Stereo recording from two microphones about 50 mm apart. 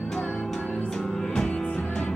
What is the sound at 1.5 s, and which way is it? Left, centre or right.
Music, left.